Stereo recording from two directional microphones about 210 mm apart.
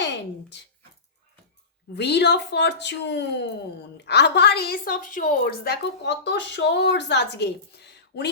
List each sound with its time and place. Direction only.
2.0 s a woman's voice: 55° left (ahead or behind)